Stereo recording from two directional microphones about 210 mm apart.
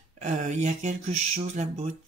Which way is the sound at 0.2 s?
35° right (ahead or behind).